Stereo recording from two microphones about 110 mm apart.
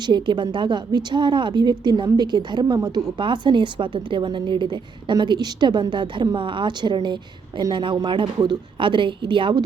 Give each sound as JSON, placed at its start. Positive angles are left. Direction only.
{"t": 0.0, "sound": "a woman's voice", "side_deg": -45}
{"t": 3.2, "sound": "a woman's voice", "side_deg": -45}